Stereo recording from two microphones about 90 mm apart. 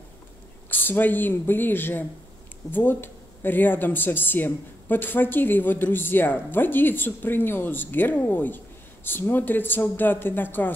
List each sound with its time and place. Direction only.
0.7 s speech: 20° left (ahead or behind)